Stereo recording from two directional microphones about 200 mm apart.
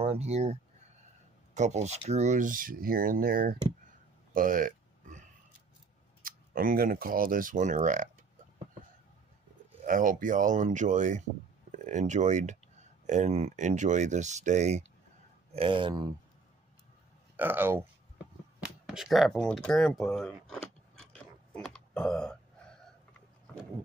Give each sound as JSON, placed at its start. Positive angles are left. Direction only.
{"t": 0.0, "sound": "speech", "side_deg": -30}
{"t": 4.3, "sound": "a sound", "side_deg": -45}
{"t": 6.2, "sound": "speech", "side_deg": -45}
{"t": 9.8, "sound": "speech", "side_deg": -40}
{"t": 17.4, "sound": "speech", "side_deg": -10}
{"t": 18.9, "sound": "speech", "side_deg": 0}
{"t": 20.5, "sound": "mechanisms", "side_deg": 5}